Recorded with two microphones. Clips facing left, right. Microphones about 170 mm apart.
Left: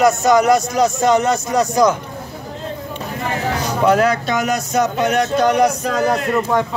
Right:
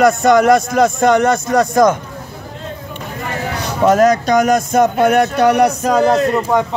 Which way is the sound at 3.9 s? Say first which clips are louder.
Right 5 dB; 45° right (ahead or behind).